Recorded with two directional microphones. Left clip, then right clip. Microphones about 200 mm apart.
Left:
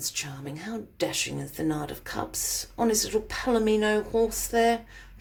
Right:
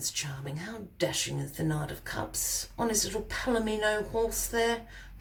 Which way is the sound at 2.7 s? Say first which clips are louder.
Left 6 dB; 35° left (ahead or behind).